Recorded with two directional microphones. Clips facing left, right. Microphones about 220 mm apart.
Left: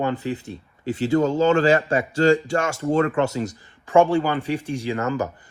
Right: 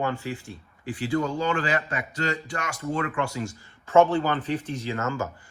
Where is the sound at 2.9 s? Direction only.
45° left (ahead or behind).